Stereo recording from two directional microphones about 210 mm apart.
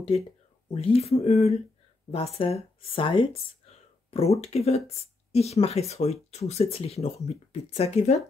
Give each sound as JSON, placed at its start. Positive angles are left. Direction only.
{"t": 0.7, "sound": "speech", "side_deg": 30}